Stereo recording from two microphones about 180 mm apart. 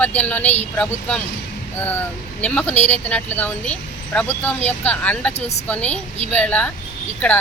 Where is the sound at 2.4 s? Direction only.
5° left (ahead or behind).